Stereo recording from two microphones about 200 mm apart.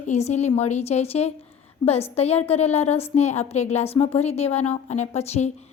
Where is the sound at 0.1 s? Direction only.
35° left (ahead or behind).